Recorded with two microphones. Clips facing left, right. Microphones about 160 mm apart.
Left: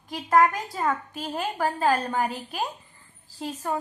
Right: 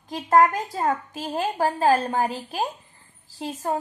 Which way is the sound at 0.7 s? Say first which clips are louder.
Right 2 dB; 40° right (ahead or behind).